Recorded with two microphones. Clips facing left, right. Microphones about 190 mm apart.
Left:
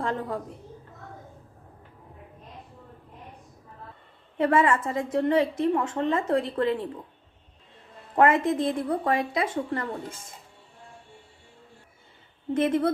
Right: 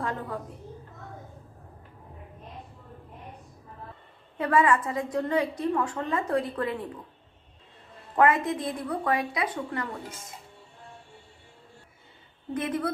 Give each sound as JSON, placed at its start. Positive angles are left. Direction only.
{"t": 0.0, "sound": "a woman's voice", "side_deg": 25}
{"t": 4.4, "sound": "a woman's voice", "side_deg": 25}
{"t": 8.1, "sound": "a woman's voice", "side_deg": 25}
{"t": 12.5, "sound": "a woman's voice", "side_deg": 25}